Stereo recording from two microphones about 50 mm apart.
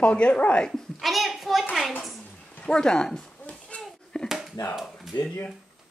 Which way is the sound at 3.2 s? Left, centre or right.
Left.